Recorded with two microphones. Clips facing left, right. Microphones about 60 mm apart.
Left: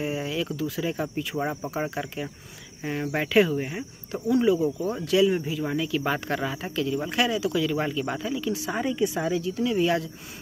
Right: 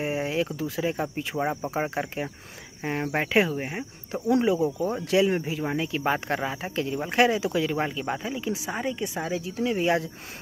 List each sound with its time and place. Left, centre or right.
0.0 s speech: right
7.8 s speech: centre
8.6 s speech: centre
9.2 s speech: centre
9.5 s speech: right